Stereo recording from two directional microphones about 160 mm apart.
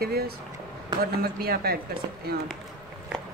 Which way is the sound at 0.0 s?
75° right (ahead or behind).